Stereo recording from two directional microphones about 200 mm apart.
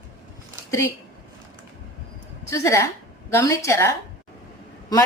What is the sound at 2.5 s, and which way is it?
A woman's voice, 15° left (ahead or behind).